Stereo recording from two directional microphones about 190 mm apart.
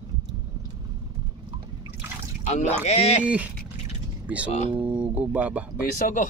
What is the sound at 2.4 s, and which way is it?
Speech, 35° left (ahead or behind).